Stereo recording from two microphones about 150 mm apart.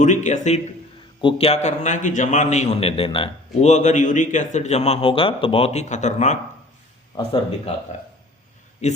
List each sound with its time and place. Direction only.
0.0 s a man's voice: 55° left (ahead or behind)
1.2 s a man's voice: 35° left (ahead or behind)
8.8 s a man's voice: 50° left (ahead or behind)